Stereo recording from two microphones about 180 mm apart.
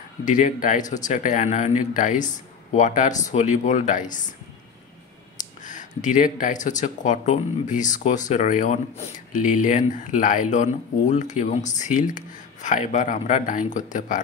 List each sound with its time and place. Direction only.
0.2 s speech: 45° left (ahead or behind)
5.6 s speech: 45° left (ahead or behind)